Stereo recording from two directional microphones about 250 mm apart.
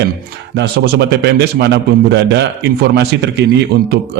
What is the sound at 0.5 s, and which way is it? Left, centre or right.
A man's voice, right.